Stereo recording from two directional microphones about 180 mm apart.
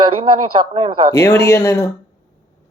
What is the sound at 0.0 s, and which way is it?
A man's voice, 30° right (ahead or behind).